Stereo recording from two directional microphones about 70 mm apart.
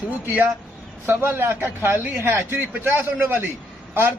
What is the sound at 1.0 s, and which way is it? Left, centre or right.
A man's voice, right.